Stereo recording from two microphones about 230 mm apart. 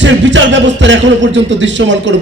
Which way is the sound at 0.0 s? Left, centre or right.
Right.